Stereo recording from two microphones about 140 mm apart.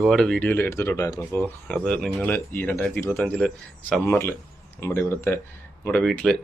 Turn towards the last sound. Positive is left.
turn(degrees=5)  # may be behind; listen again after turning